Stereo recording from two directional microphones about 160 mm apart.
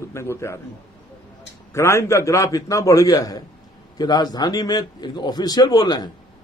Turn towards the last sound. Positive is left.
turn(degrees=25)  # may be behind; listen again after turning